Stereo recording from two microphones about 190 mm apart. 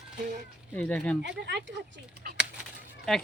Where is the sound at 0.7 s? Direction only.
5° left (ahead or behind).